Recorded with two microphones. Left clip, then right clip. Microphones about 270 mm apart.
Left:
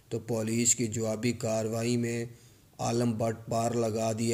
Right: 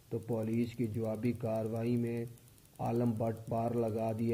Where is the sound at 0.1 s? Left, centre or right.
Left.